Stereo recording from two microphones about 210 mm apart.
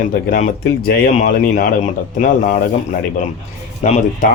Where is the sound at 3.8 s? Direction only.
35° left (ahead or behind).